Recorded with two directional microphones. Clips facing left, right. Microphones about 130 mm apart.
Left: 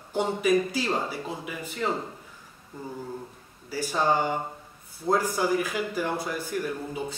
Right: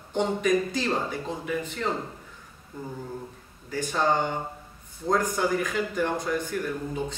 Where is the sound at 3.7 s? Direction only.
10° left (ahead or behind).